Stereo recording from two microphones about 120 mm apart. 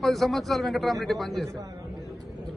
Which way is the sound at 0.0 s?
Centre (ahead or behind).